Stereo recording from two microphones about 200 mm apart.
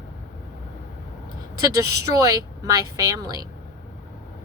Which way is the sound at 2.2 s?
15° right (ahead or behind).